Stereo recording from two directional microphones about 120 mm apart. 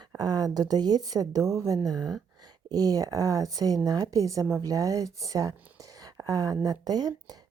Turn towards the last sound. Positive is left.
turn(degrees=-35)  # may be behind; listen again after turning